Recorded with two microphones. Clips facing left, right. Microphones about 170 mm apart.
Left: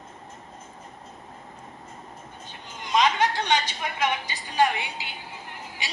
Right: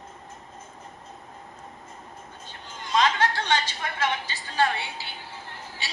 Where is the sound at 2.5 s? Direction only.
15° left (ahead or behind).